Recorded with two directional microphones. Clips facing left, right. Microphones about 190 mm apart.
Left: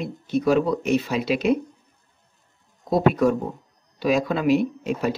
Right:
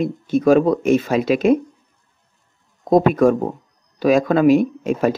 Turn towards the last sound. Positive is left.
turn(degrees=-50)  # may be behind; listen again after turning